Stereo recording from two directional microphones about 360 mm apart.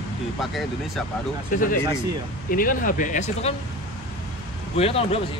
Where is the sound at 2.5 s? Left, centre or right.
Left.